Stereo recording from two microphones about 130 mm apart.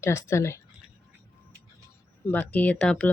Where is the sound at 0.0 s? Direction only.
20° left (ahead or behind).